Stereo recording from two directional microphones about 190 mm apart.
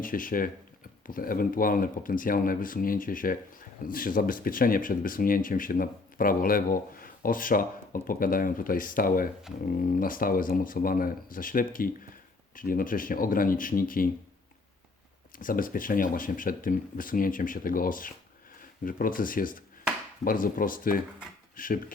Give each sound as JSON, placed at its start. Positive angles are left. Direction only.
{"t": 0.0, "sound": "speech", "side_deg": 45}
{"t": 15.4, "sound": "speech", "side_deg": 45}